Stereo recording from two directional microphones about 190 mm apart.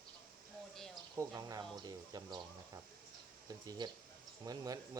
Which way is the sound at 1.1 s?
20° right (ahead or behind).